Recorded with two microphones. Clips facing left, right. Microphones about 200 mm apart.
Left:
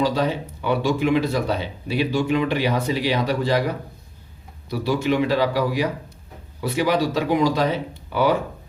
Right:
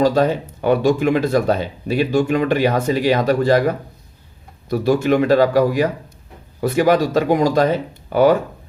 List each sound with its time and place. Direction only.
0.0 s speech: 45° right (ahead or behind)